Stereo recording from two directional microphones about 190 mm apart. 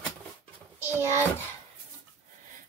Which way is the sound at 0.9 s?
15° right (ahead or behind).